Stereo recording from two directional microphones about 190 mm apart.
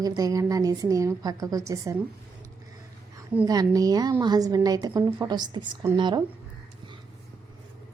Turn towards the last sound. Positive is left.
turn(degrees=-20)  # may be behind; listen again after turning